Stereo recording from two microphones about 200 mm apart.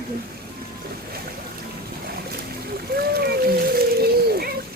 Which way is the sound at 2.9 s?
50° right (ahead or behind).